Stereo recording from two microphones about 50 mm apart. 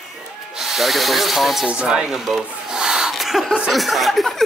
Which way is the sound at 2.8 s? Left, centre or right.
Centre.